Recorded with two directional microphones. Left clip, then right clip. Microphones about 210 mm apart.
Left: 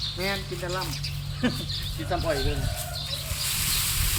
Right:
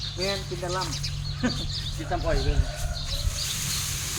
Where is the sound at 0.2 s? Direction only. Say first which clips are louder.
Even; 30° left (ahead or behind).